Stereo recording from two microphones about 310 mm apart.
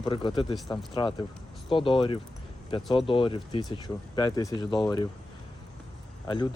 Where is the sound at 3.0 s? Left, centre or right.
Centre.